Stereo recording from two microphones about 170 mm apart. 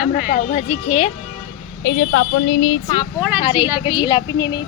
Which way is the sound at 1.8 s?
90° left.